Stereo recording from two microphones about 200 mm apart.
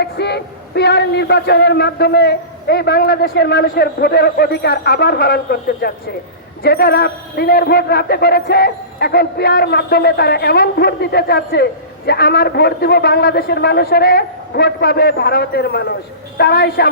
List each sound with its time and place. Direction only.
0.0 s a man's voice: 55° left (ahead or behind)